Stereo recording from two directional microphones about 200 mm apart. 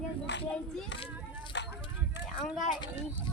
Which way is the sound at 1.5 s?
60° left (ahead or behind).